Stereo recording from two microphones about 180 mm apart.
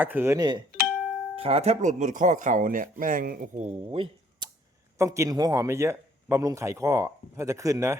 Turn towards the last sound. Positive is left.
turn(degrees=-15)  # may be behind; listen again after turning